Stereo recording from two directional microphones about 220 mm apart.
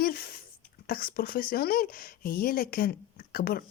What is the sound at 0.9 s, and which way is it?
Speech, 40° left (ahead or behind).